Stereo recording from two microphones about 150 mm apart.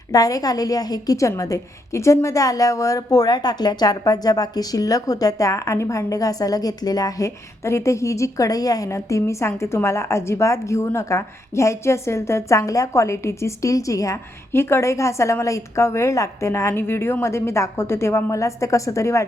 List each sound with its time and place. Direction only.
0.1 s a woman's voice: 25° left (ahead or behind)